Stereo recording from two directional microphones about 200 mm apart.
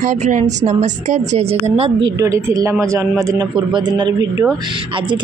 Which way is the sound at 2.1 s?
15° right (ahead or behind).